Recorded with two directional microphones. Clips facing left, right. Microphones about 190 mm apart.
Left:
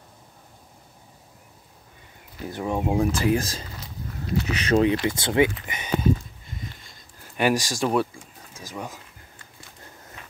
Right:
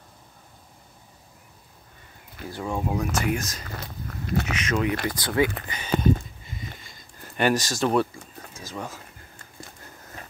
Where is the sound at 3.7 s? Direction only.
55° right (ahead or behind).